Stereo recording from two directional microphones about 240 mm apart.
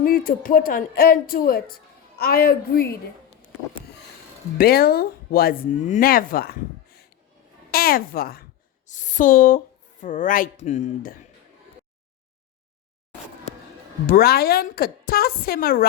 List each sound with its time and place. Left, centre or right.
0.0 s speech: left
4.5 s speech: left
14.1 s speech: left